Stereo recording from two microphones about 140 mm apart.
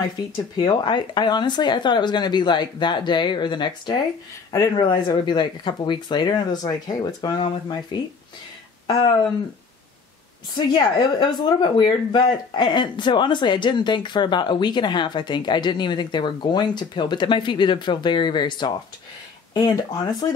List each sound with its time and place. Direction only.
0.6 s speech: 30° left (ahead or behind)
10.5 s speech: 35° left (ahead or behind)